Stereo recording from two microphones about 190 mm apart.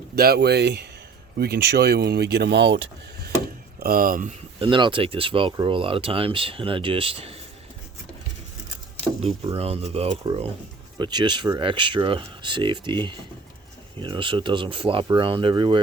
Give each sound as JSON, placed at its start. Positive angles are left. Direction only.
{"t": 0.2, "sound": "speech", "side_deg": -55}
{"t": 3.8, "sound": "speech", "side_deg": -50}
{"t": 4.6, "sound": "speech", "side_deg": -25}
{"t": 9.6, "sound": "speech", "side_deg": -30}